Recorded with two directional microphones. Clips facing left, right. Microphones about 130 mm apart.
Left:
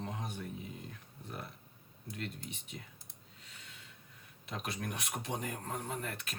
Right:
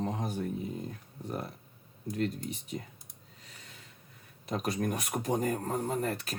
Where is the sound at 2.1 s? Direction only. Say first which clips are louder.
Right 11 dB; 40° right (ahead or behind).